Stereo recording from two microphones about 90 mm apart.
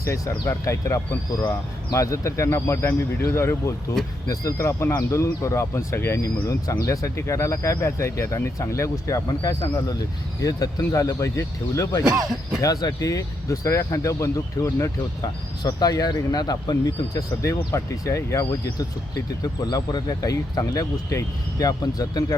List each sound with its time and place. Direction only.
0.0 s speech: 35° left (ahead or behind)
4.3 s speech: 40° left (ahead or behind)
4.6 s speech: 30° left (ahead or behind)
12.0 s speech: 10° right (ahead or behind)
12.6 s speech: 45° left (ahead or behind)
15.6 s speech: 45° left (ahead or behind)